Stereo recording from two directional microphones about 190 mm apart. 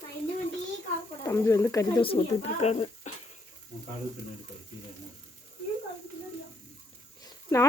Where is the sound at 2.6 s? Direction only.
35° left (ahead or behind).